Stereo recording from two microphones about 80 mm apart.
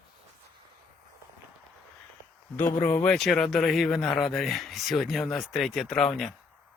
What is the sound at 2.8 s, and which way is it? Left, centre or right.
Speech, left.